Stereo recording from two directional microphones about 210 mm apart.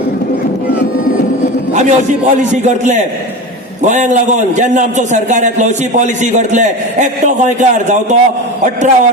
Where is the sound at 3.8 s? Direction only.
35° right (ahead or behind).